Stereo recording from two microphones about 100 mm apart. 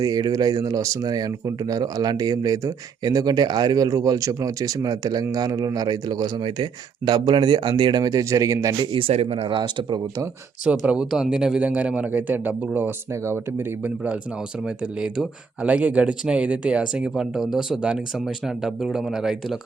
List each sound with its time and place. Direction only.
0.0 s speech: 40° right (ahead or behind)
8.9 s speech: 70° right (ahead or behind); by 10.0 s 55° right (ahead or behind)
10.7 s speech: 10° right (ahead or behind)
14.6 s speech: 10° right (ahead or behind)